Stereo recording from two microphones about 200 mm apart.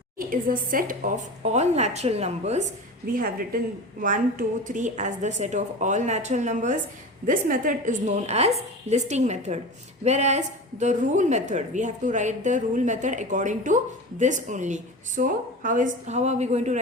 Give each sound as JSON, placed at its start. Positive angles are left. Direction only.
{"t": 0.2, "sound": "speech", "side_deg": -45}
{"t": 3.1, "sound": "a woman's voice", "side_deg": -45}